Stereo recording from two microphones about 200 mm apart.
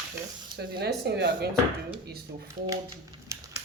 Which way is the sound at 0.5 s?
55° right (ahead or behind).